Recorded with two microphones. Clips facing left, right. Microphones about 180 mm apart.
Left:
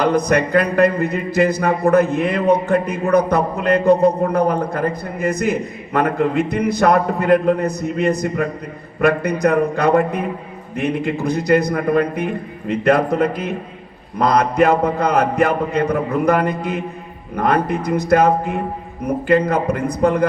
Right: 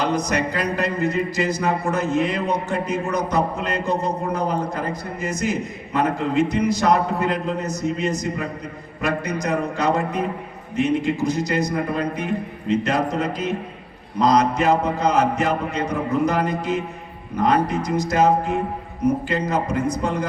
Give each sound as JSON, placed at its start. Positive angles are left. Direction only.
{"t": 0.0, "sound": "speech", "side_deg": 55}